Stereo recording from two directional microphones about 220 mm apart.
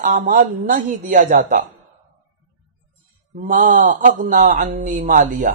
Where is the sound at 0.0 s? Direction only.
35° right (ahead or behind).